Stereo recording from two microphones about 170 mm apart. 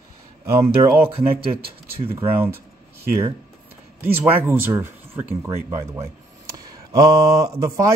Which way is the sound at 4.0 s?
10° right (ahead or behind).